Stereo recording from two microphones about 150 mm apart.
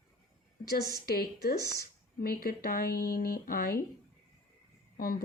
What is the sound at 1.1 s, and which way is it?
Speech, 90° left.